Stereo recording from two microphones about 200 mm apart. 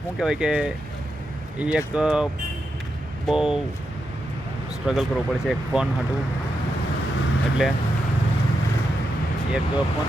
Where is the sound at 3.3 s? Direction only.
Centre (ahead or behind).